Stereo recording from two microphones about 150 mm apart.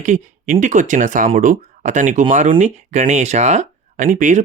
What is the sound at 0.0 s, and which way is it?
Speech, 65° right (ahead or behind).